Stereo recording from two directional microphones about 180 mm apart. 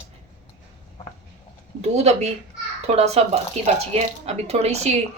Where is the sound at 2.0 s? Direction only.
40° right (ahead or behind).